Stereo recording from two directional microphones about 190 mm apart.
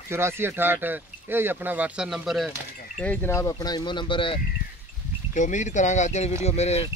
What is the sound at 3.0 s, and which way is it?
A man's voice, 10° left (ahead or behind).